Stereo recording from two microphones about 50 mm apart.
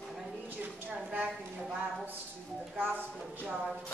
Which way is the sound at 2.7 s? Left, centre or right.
Right.